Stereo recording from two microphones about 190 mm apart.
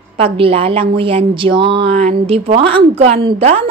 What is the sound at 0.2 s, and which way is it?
A woman's voice, 30° right (ahead or behind).